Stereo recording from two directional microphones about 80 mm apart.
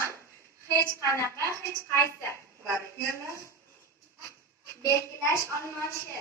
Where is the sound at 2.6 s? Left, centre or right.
Right.